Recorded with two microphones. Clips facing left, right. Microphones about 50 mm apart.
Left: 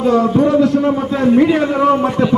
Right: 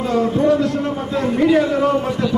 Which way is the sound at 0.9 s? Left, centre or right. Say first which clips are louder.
Left 6 dB; left.